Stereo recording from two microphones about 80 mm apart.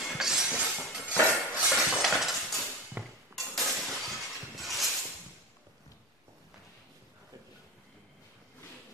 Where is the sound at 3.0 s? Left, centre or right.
Right.